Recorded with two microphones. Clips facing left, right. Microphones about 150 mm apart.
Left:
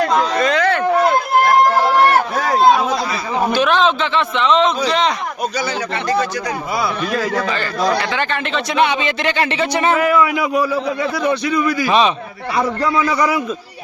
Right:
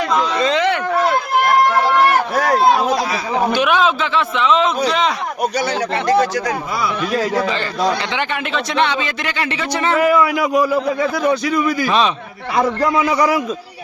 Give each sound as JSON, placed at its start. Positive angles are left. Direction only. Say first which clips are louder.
{"t": 0.0, "sound": "speech", "louder": "left 2 dB", "side_deg": 0}
{"t": 0.4, "sound": "a sound", "louder": "even", "side_deg": -20}
{"t": 2.3, "sound": "a man's voice", "louder": "left 1 dB", "side_deg": 0}
{"t": 3.5, "sound": "a man's voice", "louder": "left 2 dB", "side_deg": -10}
{"t": 7.2, "sound": "speech", "louder": "right 3 dB", "side_deg": -20}
{"t": 8.5, "sound": "speech", "louder": "left 1 dB", "side_deg": 10}
{"t": 10.0, "sound": "a man's voice", "louder": "right 1 dB", "side_deg": 0}
{"t": 12.5, "sound": "a man's voice", "louder": "right 1 dB", "side_deg": -15}